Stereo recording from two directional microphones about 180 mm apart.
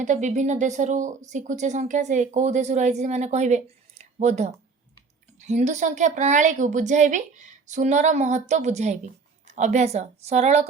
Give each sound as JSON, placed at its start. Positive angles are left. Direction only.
{"t": 0.0, "sound": "speech", "side_deg": -45}